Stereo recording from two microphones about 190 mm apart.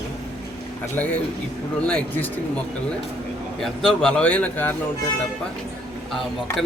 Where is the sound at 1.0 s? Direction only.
5° left (ahead or behind).